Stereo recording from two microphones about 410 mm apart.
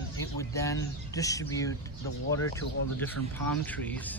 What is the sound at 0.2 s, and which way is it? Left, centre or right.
Speech, centre.